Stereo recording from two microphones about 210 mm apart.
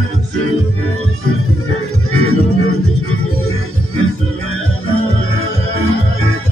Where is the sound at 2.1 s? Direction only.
90° left.